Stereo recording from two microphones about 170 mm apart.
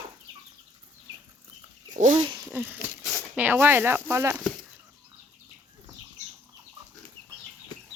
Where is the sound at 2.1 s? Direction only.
25° right (ahead or behind).